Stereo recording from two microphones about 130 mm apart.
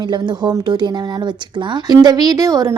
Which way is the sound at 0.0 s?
35° right (ahead or behind).